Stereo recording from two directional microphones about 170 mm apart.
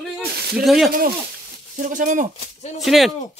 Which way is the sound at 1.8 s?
50° right (ahead or behind).